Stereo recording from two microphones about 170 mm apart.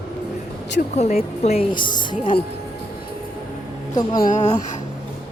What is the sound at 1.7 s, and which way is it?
Speech, 25° left (ahead or behind).